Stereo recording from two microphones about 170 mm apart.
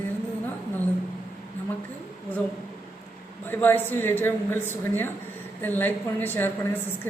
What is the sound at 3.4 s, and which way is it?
A woman's voice, 10° left (ahead or behind).